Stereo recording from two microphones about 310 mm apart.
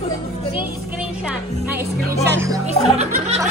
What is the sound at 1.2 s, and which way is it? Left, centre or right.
Music, centre.